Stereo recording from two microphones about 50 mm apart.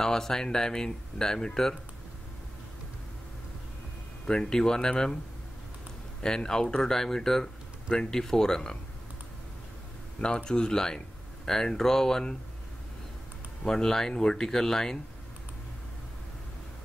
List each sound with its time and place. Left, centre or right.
0.0 s speech: centre
4.3 s speech: centre
6.2 s speech: centre
10.2 s speech: centre
13.7 s speech: centre